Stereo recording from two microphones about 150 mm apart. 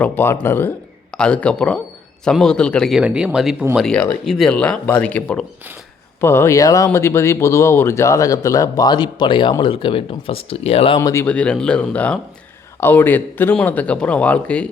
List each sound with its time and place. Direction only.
0.0 s a man's voice: 15° left (ahead or behind)
3.0 s speech: 5° right (ahead or behind)
3.8 s speech: 5° left (ahead or behind); by 11.0 s 40° left (ahead or behind)
11.0 s speech: 15° left (ahead or behind)